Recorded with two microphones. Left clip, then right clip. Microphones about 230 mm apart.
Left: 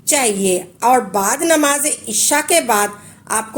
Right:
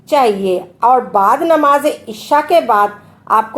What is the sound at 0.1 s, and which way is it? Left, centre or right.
A woman's voice, left.